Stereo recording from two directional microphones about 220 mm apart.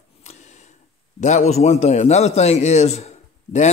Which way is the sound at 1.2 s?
30° left (ahead or behind).